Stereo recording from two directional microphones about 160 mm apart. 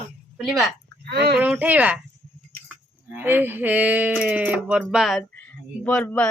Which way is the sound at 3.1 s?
10° right (ahead or behind).